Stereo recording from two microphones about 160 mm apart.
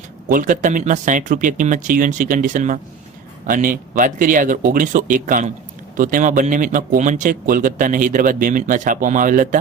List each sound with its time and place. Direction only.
0.3 s a man's voice: 55° right (ahead or behind)